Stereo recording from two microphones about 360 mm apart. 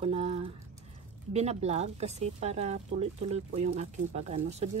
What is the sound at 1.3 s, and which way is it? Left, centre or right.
Speech, centre.